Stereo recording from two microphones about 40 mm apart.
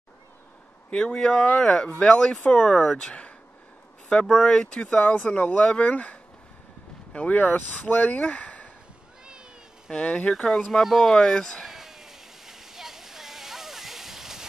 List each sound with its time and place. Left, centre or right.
0.9 s speech: centre
3.1 s speech: left
4.1 s speech: left
9.9 s speech: left
10.3 s speech: centre
11.6 s waterfall: centre